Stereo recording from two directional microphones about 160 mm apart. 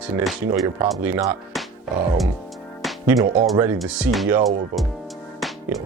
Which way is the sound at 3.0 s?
20° right (ahead or behind).